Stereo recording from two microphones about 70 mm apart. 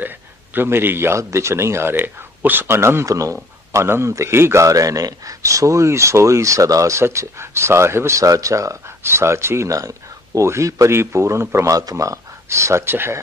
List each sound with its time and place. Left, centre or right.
0.6 s speech: right
3.1 s a man's voice: right
3.7 s a man's voice: right
9.7 s a man's voice: right
11.7 s a man's voice: right